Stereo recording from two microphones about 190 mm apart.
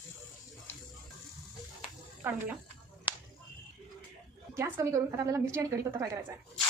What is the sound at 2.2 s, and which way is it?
Speech, 10° right (ahead or behind).